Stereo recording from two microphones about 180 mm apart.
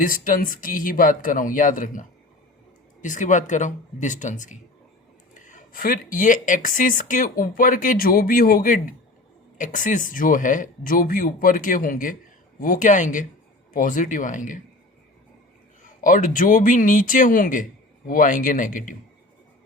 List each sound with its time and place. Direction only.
0.0 s speech: 50° left (ahead or behind)
16.0 s speech: 50° left (ahead or behind)